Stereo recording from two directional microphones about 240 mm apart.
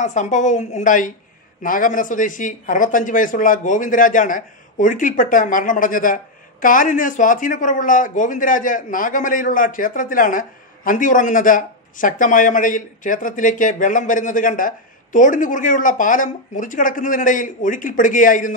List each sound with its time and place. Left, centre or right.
0.0 s speech: left